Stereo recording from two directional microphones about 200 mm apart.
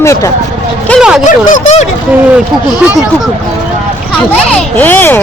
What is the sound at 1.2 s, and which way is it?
Speech, 40° left (ahead or behind).